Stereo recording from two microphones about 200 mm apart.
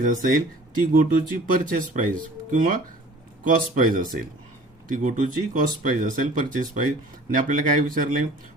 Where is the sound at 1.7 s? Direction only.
40° right (ahead or behind).